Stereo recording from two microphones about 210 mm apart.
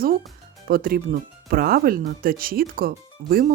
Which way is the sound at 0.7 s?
45° right (ahead or behind).